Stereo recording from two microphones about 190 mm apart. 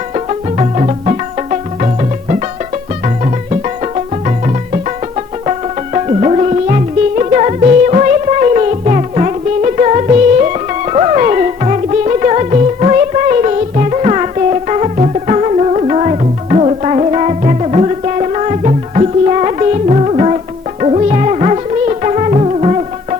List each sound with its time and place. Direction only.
0.1 s music: 35° right (ahead or behind)